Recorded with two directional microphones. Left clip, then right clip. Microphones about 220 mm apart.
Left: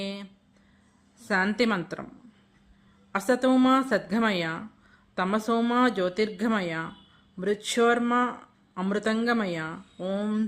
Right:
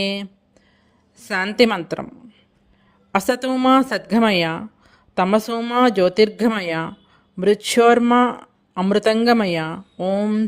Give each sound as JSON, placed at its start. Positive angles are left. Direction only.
{"t": 0.0, "sound": "speech", "side_deg": -35}
{"t": 3.1, "sound": "speech", "side_deg": -35}